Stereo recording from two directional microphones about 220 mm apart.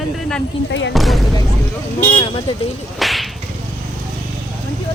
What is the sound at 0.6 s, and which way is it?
Speech, 55° left (ahead or behind).